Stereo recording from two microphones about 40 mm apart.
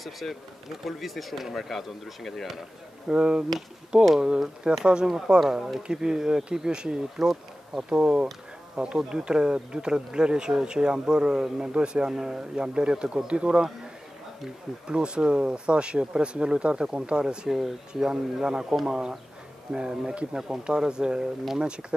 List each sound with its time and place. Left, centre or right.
0.0 s speech: centre
3.1 s speech: right
5.4 s speech: centre
5.8 s speech: centre
11.7 s speech: right
14.9 s speech: right
17.5 s speech: centre; by 21.8 s right